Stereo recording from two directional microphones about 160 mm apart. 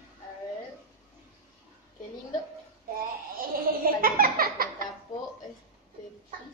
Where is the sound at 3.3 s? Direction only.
65° right (ahead or behind).